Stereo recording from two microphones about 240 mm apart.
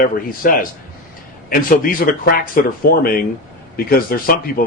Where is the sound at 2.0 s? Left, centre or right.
Left.